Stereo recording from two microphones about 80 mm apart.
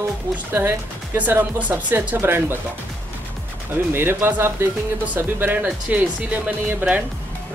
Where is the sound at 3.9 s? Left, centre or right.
Right.